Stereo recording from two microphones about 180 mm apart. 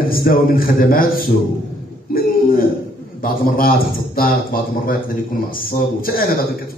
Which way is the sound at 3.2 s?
55° left (ahead or behind).